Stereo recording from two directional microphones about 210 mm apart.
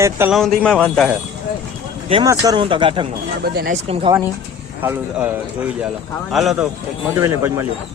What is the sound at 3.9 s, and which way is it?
Speech, 25° right (ahead or behind).